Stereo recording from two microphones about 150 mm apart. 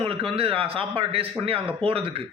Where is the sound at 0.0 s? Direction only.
40° right (ahead or behind).